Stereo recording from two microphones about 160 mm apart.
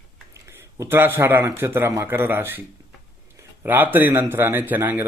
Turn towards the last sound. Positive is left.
turn(degrees=-10)  # may be behind; listen again after turning